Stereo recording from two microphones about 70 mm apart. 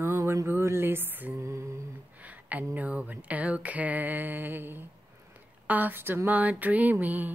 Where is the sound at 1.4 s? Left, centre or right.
Right.